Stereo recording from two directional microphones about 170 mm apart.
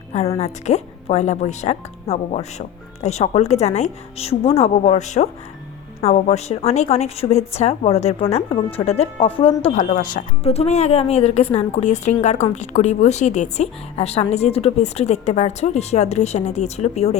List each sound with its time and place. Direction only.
0.1 s a woman's voice: 40° left (ahead or behind)
9.7 s speech: 50° left (ahead or behind)
10.4 s a woman's voice: 35° left (ahead or behind)